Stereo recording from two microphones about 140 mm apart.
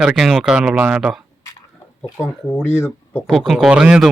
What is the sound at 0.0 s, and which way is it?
A man's voice, 5° right (ahead or behind).